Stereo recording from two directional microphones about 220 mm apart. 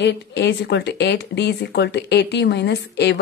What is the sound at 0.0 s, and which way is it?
Speech, 50° left (ahead or behind).